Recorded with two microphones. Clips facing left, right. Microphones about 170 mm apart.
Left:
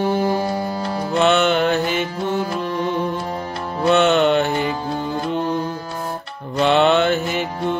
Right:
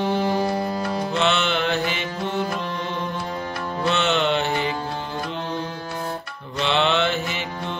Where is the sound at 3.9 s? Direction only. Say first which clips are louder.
Left 7 dB; 50° left (ahead or behind).